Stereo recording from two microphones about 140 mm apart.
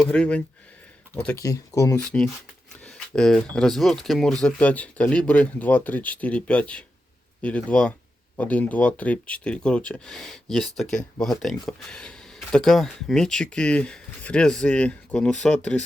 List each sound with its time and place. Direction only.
0.0 s speech: 10° left (ahead or behind)
1.4 s speech: 25° left (ahead or behind)
2.0 s speech: 5° left (ahead or behind)